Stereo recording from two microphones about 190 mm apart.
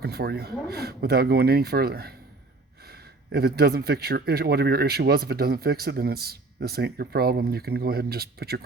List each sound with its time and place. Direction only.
0.0 s speech: 55° right (ahead or behind)